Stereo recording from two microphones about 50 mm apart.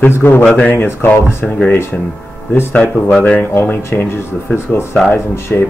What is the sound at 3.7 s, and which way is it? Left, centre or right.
Speech, left.